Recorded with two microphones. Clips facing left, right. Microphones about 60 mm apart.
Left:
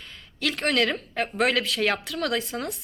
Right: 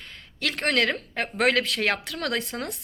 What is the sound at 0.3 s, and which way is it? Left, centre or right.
Speech, right.